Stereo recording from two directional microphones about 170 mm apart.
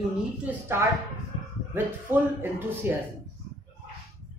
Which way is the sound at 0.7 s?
15° right (ahead or behind).